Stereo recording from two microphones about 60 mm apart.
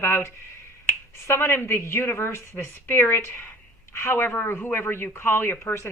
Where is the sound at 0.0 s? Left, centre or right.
Left.